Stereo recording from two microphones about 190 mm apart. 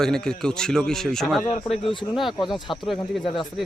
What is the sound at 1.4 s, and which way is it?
Speech, 45° left (ahead or behind).